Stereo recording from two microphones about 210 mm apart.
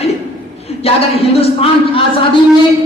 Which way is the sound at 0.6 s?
30° left (ahead or behind).